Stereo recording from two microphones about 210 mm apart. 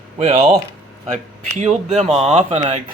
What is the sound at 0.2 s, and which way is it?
Speech, 30° right (ahead or behind).